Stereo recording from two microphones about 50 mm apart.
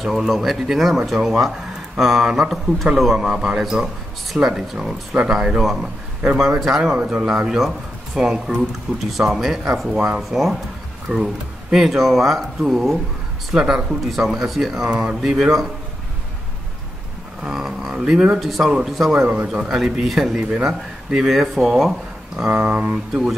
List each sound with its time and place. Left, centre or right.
0.0 s speech: centre
3.3 s speech: centre
5.1 s speech: right
5.6 s speech: centre
9.9 s speech: right
10.3 s speech: centre
17.4 s speech: centre
18.4 s speech: centre
19.2 s speech: right; by 22.5 s centre
22.5 s speech: right